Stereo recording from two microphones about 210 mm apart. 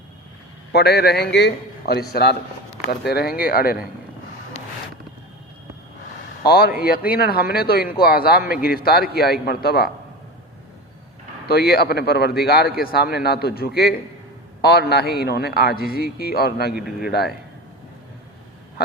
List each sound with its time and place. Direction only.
0.7 s a man's voice: 50° left (ahead or behind)
3.1 s a man's voice: 50° left (ahead or behind)
6.4 s a man's voice: 50° left (ahead or behind)
11.4 s a man's voice: 50° left (ahead or behind)